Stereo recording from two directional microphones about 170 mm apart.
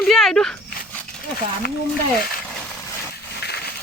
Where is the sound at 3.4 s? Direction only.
70° left (ahead or behind).